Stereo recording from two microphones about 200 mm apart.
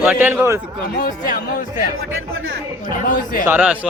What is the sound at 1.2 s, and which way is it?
Speech, 40° left (ahead or behind).